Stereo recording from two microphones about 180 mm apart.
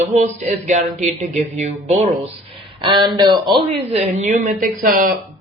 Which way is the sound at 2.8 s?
25° right (ahead or behind).